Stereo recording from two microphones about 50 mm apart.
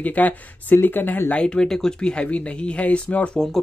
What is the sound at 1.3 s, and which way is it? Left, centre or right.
Speech, centre.